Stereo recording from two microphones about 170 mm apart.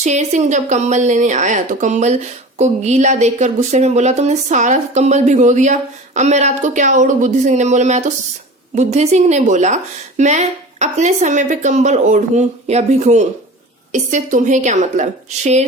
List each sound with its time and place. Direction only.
0.0 s speech: 45° right (ahead or behind)